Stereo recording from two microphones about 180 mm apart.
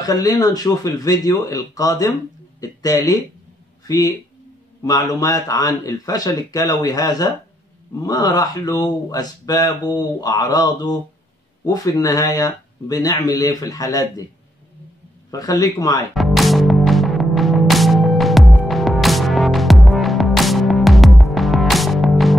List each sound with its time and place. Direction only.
0.0 s speech: 20° left (ahead or behind)
15.3 s speech: 20° left (ahead or behind)
16.2 s music: centre (ahead or behind)